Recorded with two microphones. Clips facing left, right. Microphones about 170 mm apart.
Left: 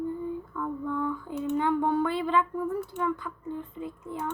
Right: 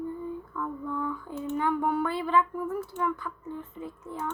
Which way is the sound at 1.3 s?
20° left (ahead or behind).